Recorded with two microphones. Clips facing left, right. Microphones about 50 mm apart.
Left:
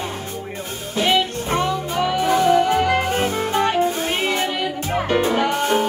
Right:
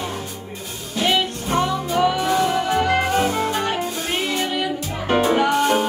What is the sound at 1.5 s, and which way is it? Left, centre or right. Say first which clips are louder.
Music: right 1 dB; left.